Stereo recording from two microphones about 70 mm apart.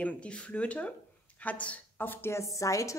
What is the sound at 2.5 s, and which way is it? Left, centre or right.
Speech, left.